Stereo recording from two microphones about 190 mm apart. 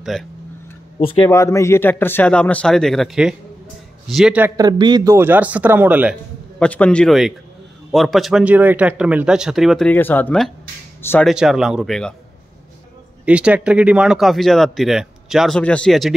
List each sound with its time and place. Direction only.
0.0 s speech: centre (ahead or behind)
0.9 s speech: 30° left (ahead or behind)
1.3 s a man's voice: 15° left (ahead or behind); by 4.5 s 5° right (ahead or behind)
4.6 s speech: 20° right (ahead or behind)
6.6 s speech: 5° left (ahead or behind)
11.2 s speech: centre (ahead or behind)
13.2 s speech: 5° right (ahead or behind)